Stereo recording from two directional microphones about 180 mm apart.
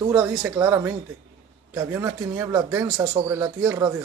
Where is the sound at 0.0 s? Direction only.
20° right (ahead or behind).